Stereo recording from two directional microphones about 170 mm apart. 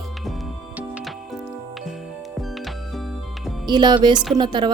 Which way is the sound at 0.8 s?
5° right (ahead or behind).